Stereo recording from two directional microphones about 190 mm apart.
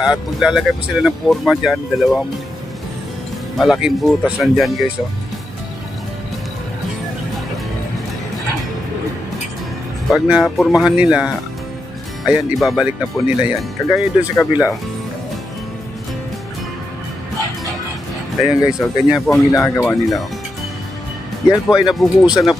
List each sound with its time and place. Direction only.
0.0 s speech: 5° right (ahead or behind)
3.5 s speech: 5° right (ahead or behind)
10.1 s speech: 5° right (ahead or behind)
18.4 s speech: 5° right (ahead or behind)
19.5 s speech: 15° left (ahead or behind)
19.9 s speech: centre (ahead or behind)
21.5 s speech: 5° right (ahead or behind)